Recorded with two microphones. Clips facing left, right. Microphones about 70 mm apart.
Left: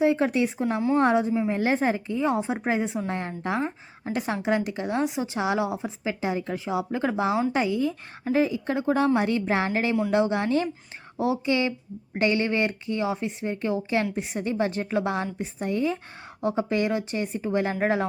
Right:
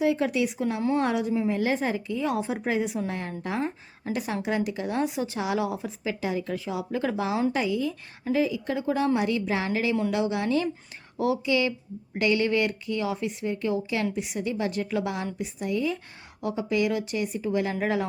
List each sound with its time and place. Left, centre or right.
0.0 s a woman's voice: left